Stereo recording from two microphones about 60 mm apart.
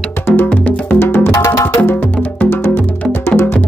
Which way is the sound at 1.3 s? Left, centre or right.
Left.